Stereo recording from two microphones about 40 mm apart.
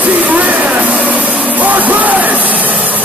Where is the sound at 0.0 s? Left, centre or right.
Right.